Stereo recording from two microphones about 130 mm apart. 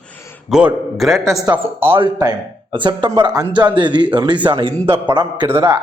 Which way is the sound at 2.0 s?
30° right (ahead or behind).